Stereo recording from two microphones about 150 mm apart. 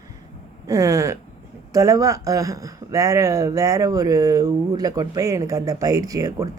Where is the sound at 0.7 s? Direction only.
20° right (ahead or behind).